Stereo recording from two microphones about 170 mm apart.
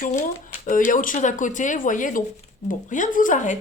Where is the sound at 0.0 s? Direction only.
50° left (ahead or behind).